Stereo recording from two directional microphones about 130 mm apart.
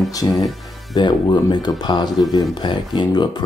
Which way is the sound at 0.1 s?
30° left (ahead or behind).